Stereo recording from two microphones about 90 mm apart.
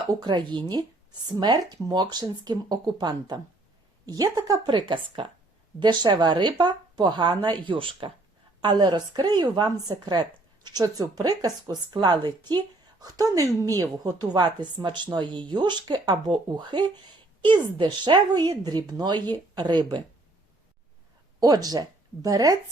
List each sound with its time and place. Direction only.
0.1 s a woman's voice: 55° right (ahead or behind)
4.6 s a woman's voice: 65° right (ahead or behind)
5.8 s a woman's voice: 55° right (ahead or behind); by 8.1 s 75° right (ahead or behind)
8.6 s a woman's voice: 55° right (ahead or behind)
21.4 s speech: 45° right (ahead or behind)